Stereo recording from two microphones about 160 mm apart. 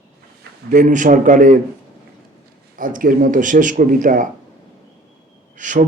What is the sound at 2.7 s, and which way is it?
A man's voice, 60° right (ahead or behind).